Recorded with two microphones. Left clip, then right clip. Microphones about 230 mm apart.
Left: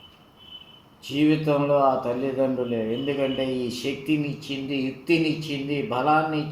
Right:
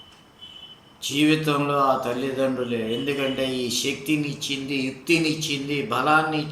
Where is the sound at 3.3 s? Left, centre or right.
Right.